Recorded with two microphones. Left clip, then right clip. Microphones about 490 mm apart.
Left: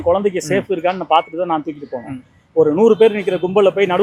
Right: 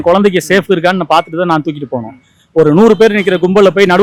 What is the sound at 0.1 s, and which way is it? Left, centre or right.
A man's voice, right.